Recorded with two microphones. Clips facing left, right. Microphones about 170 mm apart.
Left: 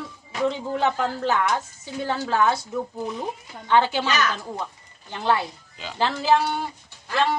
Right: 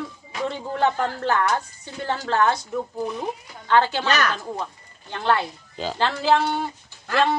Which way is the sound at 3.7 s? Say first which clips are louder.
Even; 15° left (ahead or behind).